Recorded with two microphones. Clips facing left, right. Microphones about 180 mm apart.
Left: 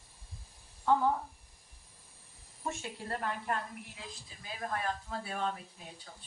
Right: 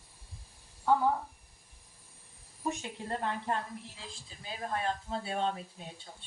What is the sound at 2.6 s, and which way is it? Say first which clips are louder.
Speech: right 3 dB; 20° right (ahead or behind).